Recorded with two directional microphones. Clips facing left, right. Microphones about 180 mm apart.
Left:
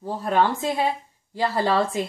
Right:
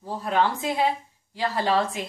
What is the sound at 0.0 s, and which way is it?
Speech, 45° left (ahead or behind).